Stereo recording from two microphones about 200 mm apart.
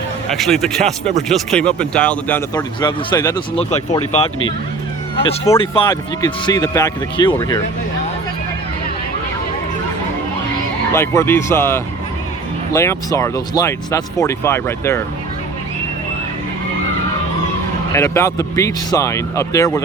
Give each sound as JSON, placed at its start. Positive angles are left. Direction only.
{"t": 0.3, "sound": "speech", "side_deg": 0}
{"t": 2.6, "sound": "speech", "side_deg": 20}
{"t": 3.5, "sound": "speech", "side_deg": 30}
{"t": 5.5, "sound": "speech", "side_deg": 25}
{"t": 10.9, "sound": "speech", "side_deg": 15}
{"t": 17.9, "sound": "speech", "side_deg": 15}